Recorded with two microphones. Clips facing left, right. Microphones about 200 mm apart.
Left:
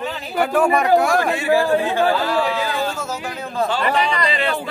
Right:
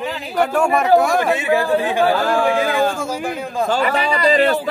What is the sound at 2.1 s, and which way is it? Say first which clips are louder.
Speech: right 3 dB; 50° right (ahead or behind).